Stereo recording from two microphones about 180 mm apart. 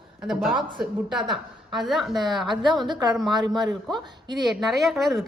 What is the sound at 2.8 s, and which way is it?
Speech, 25° right (ahead or behind).